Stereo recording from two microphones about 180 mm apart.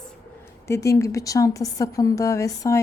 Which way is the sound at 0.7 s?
15° left (ahead or behind).